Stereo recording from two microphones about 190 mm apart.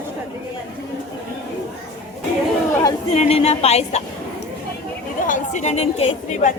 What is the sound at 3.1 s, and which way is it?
Speech, 35° left (ahead or behind).